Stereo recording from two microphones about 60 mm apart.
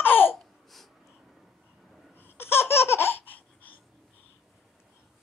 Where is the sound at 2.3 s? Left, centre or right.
Left.